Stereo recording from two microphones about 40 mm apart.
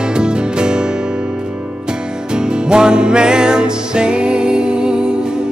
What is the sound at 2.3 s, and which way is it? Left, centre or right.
Music, right.